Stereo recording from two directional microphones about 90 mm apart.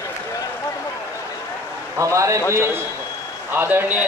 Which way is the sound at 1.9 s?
35° right (ahead or behind).